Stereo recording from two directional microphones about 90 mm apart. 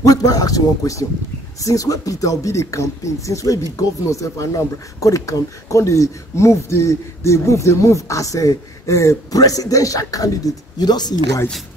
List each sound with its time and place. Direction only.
0.0 s speech: 45° left (ahead or behind)